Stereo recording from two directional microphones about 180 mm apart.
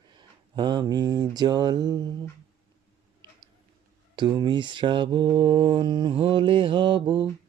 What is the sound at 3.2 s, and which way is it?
Tick-tock, 25° right (ahead or behind).